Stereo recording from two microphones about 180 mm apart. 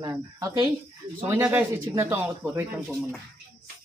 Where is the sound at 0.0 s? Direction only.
15° right (ahead or behind).